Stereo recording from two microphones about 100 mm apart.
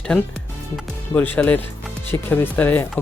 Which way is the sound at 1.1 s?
15° left (ahead or behind).